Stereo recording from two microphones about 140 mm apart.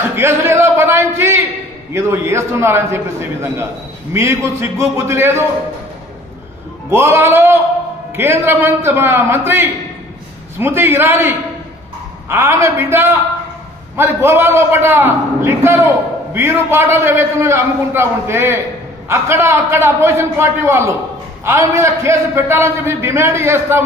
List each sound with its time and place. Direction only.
0.1 s a man's voice: 20° right (ahead or behind)
6.9 s a man's voice: 15° right (ahead or behind)